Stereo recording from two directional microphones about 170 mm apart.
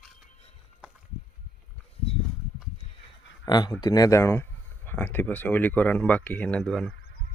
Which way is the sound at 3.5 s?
25° left (ahead or behind).